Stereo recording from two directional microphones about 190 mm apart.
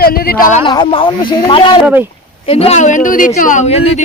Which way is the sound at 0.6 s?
25° left (ahead or behind).